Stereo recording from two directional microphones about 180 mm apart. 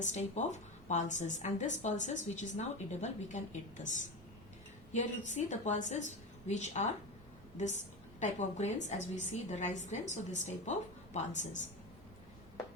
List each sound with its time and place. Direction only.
0.0 s a woman's voice: 40° left (ahead or behind)